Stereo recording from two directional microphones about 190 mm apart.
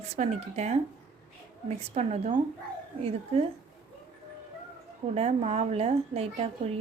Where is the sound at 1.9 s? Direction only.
35° right (ahead or behind).